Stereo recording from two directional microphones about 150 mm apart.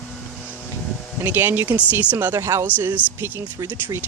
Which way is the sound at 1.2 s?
15° right (ahead or behind).